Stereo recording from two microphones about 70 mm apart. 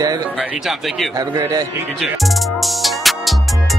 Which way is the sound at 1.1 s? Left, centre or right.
Right.